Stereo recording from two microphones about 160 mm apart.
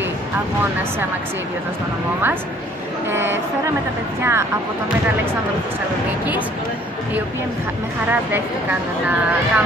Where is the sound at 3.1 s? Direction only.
15° right (ahead or behind).